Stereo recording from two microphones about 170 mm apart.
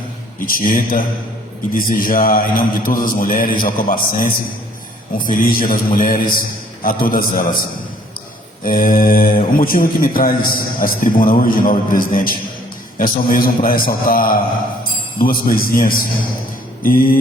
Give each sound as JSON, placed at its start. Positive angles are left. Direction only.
{"t": 0.4, "sound": "speech", "side_deg": 55}
{"t": 8.6, "sound": "speech", "side_deg": 55}